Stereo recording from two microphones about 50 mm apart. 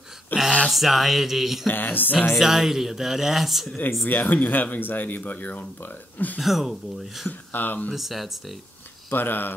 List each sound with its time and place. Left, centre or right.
0.3 s speech: left
0.7 s speech: centre
1.7 s speech: left
2.3 s speech: centre
4.0 s speech: left
6.4 s speech: centre
7.2 s speech: left
7.9 s speech: centre
9.1 s speech: left